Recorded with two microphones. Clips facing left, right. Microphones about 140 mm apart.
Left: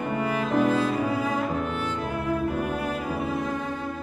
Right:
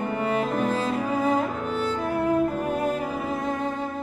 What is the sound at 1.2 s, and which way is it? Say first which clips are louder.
Music: right 2 dB; 35° right (ahead or behind).